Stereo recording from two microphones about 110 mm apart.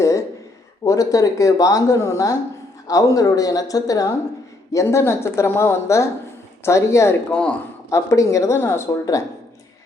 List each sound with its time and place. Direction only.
0.0 s a sound: 30° left (ahead or behind)
0.9 s a woman's voice: 30° left (ahead or behind)
7.3 s speech: 10° left (ahead or behind)
7.9 s a woman's voice: 30° left (ahead or behind)